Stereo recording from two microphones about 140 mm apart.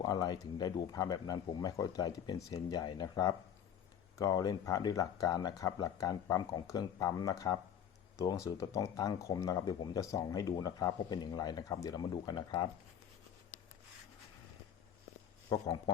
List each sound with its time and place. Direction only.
0.0 s speech: 25° left (ahead or behind)
15.4 s speech: 30° left (ahead or behind)